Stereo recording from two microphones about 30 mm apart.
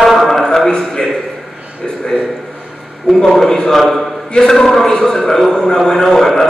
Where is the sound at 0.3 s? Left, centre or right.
Centre.